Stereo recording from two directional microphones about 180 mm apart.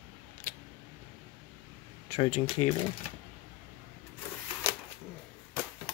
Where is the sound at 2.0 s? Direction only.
35° left (ahead or behind).